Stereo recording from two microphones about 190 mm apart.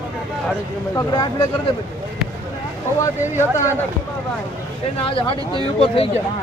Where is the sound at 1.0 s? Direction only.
20° left (ahead or behind).